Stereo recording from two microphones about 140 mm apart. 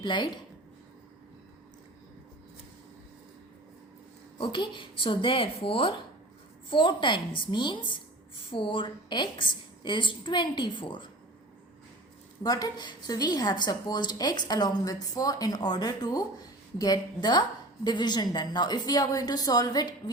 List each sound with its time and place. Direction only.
0.0 s a woman's voice: 35° left (ahead or behind)
4.4 s a woman's voice: 35° left (ahead or behind)
12.4 s a woman's voice: 25° left (ahead or behind)